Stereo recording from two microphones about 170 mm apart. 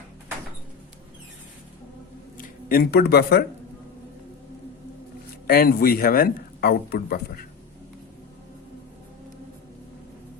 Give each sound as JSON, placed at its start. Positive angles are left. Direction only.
{"t": 2.4, "sound": "speech", "side_deg": 60}
{"t": 5.5, "sound": "speech", "side_deg": 60}